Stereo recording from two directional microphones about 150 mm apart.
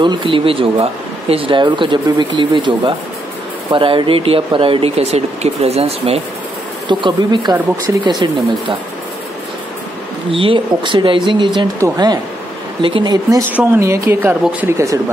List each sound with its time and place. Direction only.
0.0 s speech: 30° right (ahead or behind)
6.9 s speech: 30° right (ahead or behind)
7.5 s speech: 15° right (ahead or behind)
8.0 s speech: 30° right (ahead or behind)
10.3 s speech: 35° right (ahead or behind)
13.4 s speech: 15° right (ahead or behind)